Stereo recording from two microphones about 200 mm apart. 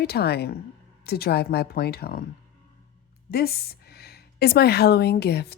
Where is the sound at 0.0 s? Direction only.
55° left (ahead or behind).